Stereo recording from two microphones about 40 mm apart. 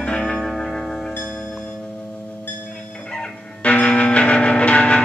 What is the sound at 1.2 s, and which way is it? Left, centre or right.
Music, left.